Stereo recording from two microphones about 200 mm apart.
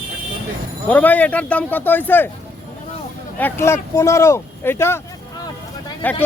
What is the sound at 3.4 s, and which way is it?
Speech, 10° left (ahead or behind).